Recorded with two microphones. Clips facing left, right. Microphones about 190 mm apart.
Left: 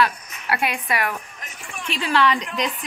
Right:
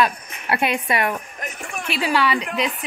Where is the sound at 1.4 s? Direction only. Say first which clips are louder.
Right 6 dB; 55° right (ahead or behind).